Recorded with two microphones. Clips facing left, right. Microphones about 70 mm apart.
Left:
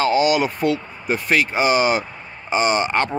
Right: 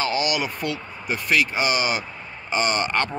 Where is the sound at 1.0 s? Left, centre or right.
Left.